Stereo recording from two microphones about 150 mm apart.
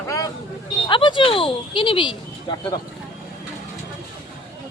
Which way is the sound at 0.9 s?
35° left (ahead or behind).